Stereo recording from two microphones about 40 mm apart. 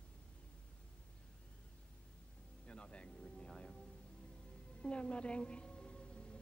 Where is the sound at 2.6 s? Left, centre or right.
Left.